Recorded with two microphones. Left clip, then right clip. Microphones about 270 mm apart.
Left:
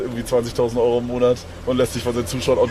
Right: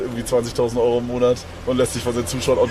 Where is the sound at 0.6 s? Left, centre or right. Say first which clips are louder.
Left 1 dB; right.